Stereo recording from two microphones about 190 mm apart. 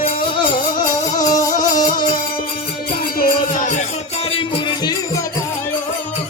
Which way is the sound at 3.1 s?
45° left (ahead or behind).